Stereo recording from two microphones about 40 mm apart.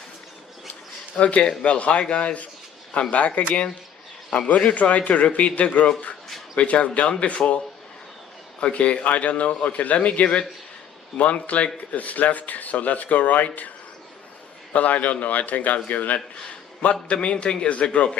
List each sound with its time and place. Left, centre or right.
1.1 s speech: left
4.4 s speech: left
8.6 s speech: left
14.7 s a man's voice: left
16.8 s speech: left